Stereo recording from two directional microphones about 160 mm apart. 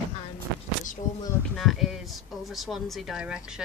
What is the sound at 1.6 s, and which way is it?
Speech, centre (ahead or behind).